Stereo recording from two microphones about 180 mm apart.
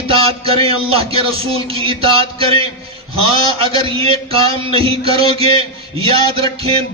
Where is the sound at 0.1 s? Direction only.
30° right (ahead or behind).